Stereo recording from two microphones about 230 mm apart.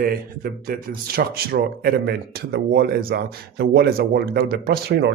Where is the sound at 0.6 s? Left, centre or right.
Right.